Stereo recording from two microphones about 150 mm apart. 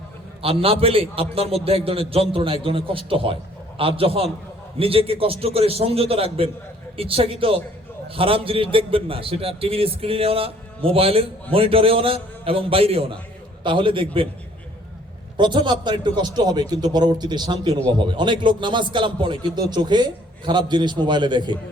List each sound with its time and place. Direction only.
0.4 s a man's voice: 40° right (ahead or behind)
15.4 s a man's voice: 30° right (ahead or behind)